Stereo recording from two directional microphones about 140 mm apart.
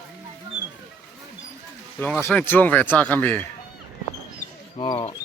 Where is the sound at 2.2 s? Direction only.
10° left (ahead or behind).